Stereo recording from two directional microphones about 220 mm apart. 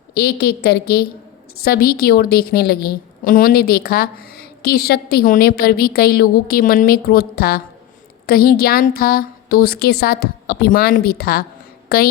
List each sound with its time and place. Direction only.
0.1 s a woman's voice: 45° left (ahead or behind)